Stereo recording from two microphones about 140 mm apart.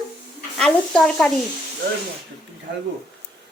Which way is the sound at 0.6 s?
5° left (ahead or behind).